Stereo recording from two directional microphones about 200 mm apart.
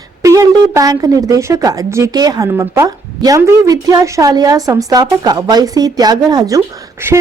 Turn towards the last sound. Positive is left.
turn(degrees=-15)  # may be behind; listen again after turning